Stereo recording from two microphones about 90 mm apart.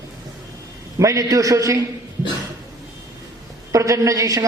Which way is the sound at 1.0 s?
40° right (ahead or behind).